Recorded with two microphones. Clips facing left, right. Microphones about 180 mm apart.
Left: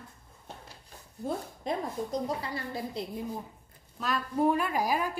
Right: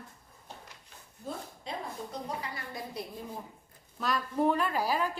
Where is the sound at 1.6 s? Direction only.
40° left (ahead or behind).